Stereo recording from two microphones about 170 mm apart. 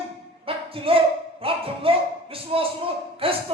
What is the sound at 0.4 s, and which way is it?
Speech, 30° right (ahead or behind).